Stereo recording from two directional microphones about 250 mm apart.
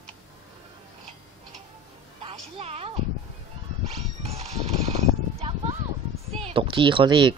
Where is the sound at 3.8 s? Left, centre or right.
Right.